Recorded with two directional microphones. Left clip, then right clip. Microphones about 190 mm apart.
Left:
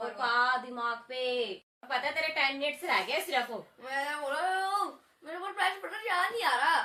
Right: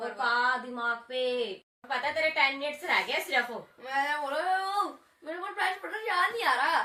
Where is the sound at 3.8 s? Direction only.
10° right (ahead or behind).